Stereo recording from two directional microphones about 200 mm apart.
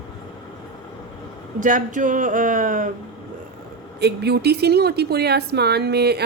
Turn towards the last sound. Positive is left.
turn(degrees=-55)  # may be behind; listen again after turning